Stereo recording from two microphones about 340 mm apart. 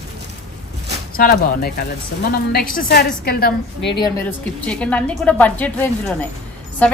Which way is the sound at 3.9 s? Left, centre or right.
Centre.